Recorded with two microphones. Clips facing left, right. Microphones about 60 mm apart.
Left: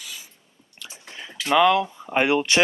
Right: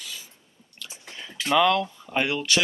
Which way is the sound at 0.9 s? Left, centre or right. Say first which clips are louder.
Left 2 dB; centre.